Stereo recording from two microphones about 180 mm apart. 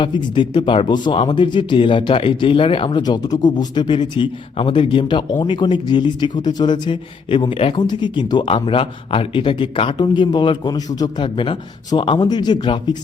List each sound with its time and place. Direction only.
0.0 s speech: 25° left (ahead or behind)